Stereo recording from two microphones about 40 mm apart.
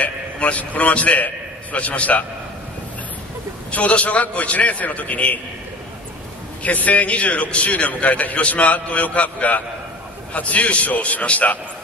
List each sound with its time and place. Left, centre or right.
0.0 s a man's voice: left
3.7 s a man's voice: left
6.6 s a man's voice: left